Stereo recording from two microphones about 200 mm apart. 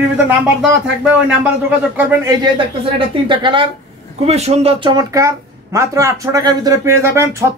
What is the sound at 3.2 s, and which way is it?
A woman's voice, 25° right (ahead or behind).